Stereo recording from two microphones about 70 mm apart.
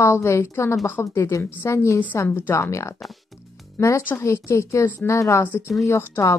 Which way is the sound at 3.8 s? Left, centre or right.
Left.